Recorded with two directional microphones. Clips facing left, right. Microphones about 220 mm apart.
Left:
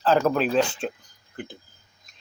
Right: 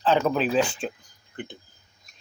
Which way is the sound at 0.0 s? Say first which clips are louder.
Left 1 dB; centre (ahead or behind).